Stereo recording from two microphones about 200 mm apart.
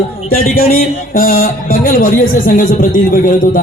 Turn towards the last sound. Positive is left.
turn(degrees=45)  # may be behind; listen again after turning